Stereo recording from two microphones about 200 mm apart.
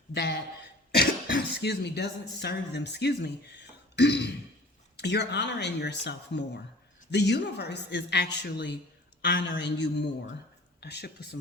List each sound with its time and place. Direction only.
0.1 s speech: 55° left (ahead or behind)